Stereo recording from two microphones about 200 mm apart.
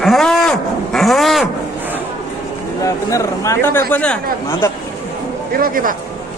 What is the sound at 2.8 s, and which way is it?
A man's voice, 15° left (ahead or behind).